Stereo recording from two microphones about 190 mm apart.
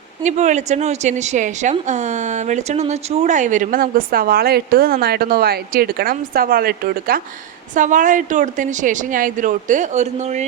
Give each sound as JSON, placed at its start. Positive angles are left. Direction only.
{"t": 0.2, "sound": "a woman's voice", "side_deg": -40}